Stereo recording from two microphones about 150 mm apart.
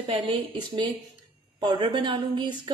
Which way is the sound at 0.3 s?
30° right (ahead or behind).